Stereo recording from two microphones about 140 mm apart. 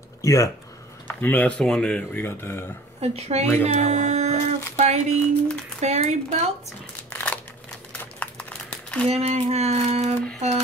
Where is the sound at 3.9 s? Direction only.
55° right (ahead or behind).